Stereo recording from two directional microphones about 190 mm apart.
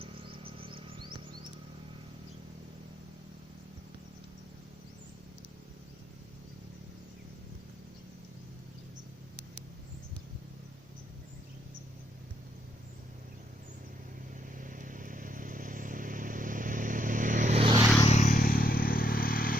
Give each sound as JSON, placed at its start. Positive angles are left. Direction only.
{"t": 0.0, "sound": "music", "side_deg": -30}
{"t": 14.5, "sound": "vehicle", "side_deg": -45}
{"t": 18.0, "sound": "vehicle", "side_deg": 35}